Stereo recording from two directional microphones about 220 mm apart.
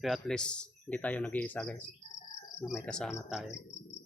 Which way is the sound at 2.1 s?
30° left (ahead or behind).